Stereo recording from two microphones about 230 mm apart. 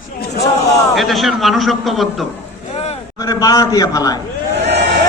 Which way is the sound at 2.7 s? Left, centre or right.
Left.